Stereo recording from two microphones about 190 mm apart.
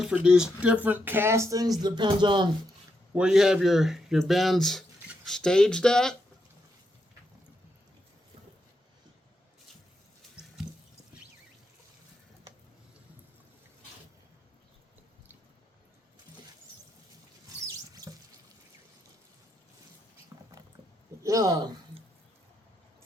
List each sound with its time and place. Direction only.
0.0 s speech: 5° right (ahead or behind); by 2.5 s 25° right (ahead or behind)
3.2 s speech: 5° right (ahead or behind)
17.7 s sink: 20° right (ahead or behind)
20.3 s a sound: 15° right (ahead or behind)
21.2 s speech: 20° right (ahead or behind)